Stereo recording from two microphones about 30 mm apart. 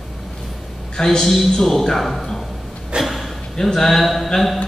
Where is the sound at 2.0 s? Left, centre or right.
Centre.